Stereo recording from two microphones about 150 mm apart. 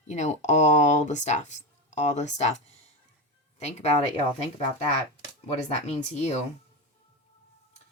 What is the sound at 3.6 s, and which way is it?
Speech, 45° left (ahead or behind).